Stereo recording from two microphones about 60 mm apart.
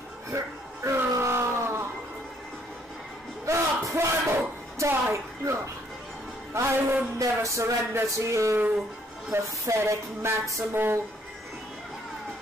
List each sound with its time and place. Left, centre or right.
0.8 s music: right
3.4 s a sound: right
6.5 s speech: right
7.2 s music: right
9.3 s speech: right
9.7 s music: right
10.7 s speech: right